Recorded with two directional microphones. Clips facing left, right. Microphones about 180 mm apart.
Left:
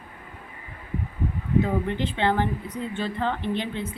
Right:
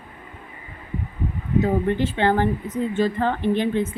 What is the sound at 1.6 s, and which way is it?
Speech, 45° right (ahead or behind).